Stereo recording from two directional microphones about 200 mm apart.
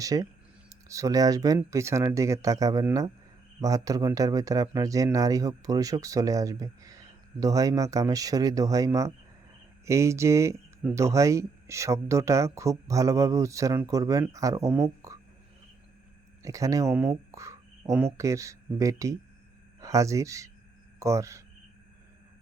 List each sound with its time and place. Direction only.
0.0 s speech: 15° right (ahead or behind)
16.4 s speech: 15° right (ahead or behind)
17.3 s a sound: 15° right (ahead or behind)
18.2 s speech: 15° right (ahead or behind)